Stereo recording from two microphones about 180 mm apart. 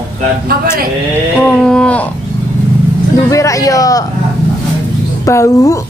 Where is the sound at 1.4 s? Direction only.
5° left (ahead or behind).